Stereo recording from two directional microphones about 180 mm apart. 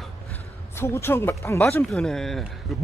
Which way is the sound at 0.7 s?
10° left (ahead or behind).